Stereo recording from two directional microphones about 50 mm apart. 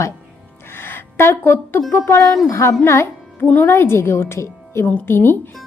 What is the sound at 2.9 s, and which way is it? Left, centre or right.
Music, left.